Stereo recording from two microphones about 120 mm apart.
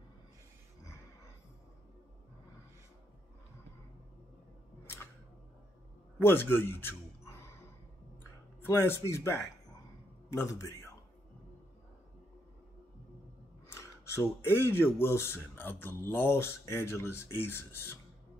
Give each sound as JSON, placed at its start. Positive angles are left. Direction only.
{"t": 4.8, "sound": "camera", "side_deg": 20}
{"t": 6.1, "sound": "gasp", "side_deg": 15}
{"t": 8.5, "sound": "speech", "side_deg": 20}
{"t": 13.7, "sound": "speech", "side_deg": 20}